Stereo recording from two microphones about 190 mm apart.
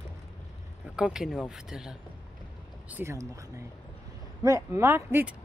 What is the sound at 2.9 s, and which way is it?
Speech, 15° right (ahead or behind).